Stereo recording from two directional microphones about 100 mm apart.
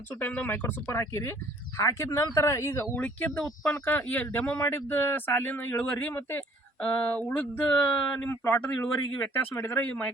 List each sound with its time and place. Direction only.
0.2 s speech: 20° left (ahead or behind)
2.9 s speech: 15° left (ahead or behind)
8.3 s speech: 25° left (ahead or behind)